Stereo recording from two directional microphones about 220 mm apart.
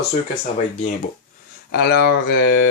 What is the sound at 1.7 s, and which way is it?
Speech, 45° left (ahead or behind).